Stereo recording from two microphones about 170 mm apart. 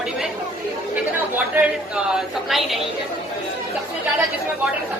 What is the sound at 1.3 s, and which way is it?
A woman's voice, 5° right (ahead or behind).